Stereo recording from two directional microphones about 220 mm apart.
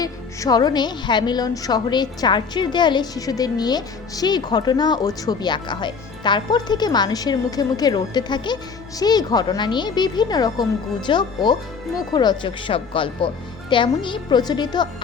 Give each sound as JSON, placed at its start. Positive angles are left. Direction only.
{"t": 0.0, "sound": "a woman's voice", "side_deg": 15}